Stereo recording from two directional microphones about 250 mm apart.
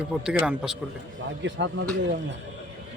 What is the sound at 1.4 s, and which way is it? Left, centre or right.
Speech, right.